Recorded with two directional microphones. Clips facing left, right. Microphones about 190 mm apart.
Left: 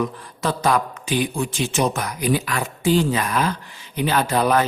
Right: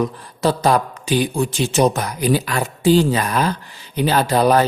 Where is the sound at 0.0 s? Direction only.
35° right (ahead or behind).